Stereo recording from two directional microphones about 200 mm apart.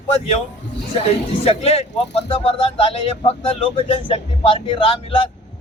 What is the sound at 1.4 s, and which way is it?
Speech, 30° left (ahead or behind).